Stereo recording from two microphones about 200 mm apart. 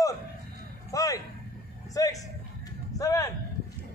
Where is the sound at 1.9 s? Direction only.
15° left (ahead or behind).